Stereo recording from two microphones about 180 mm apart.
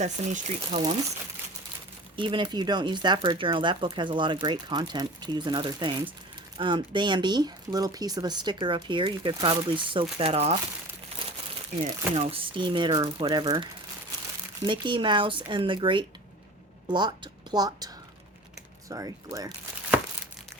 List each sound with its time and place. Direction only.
0.0 s speech: 40° right (ahead or behind)
2.1 s speech: 25° right (ahead or behind)
11.8 s speech: 35° right (ahead or behind); by 19.5 s 20° right (ahead or behind)